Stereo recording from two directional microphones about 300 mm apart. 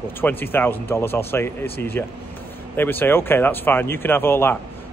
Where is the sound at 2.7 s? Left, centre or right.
Centre.